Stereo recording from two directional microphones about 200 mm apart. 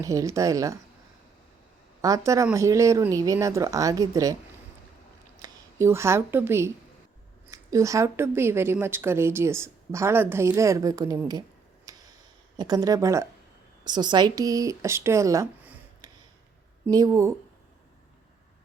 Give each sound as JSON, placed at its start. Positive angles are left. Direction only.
{"t": 0.0, "sound": "a woman's voice", "side_deg": -15}
{"t": 2.0, "sound": "a woman's voice", "side_deg": -15}
{"t": 5.4, "sound": "a woman's voice", "side_deg": -15}
{"t": 11.9, "sound": "a sound", "side_deg": -15}
{"t": 12.5, "sound": "a woman's voice", "side_deg": -20}